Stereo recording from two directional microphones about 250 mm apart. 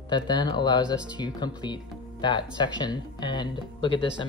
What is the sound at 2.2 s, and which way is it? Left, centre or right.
Speech, centre.